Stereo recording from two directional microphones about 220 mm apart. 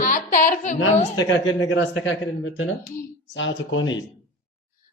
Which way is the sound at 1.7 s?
55° left (ahead or behind).